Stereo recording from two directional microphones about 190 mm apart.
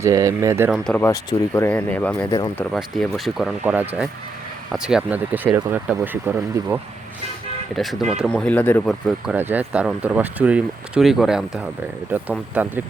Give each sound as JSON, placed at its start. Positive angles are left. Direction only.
{"t": 0.0, "sound": "speech", "side_deg": -15}
{"t": 0.7, "sound": "speech", "side_deg": 5}
{"t": 1.0, "sound": "speech", "side_deg": 15}
{"t": 7.8, "sound": "speech", "side_deg": 0}